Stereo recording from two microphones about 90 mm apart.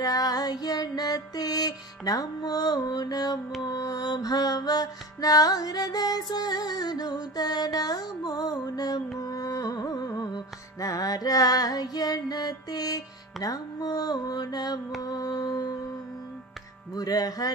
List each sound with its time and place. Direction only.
0.0 s child singing: 45° left (ahead or behind)
3.6 s music: 45° left (ahead or behind)
16.9 s music: 45° left (ahead or behind)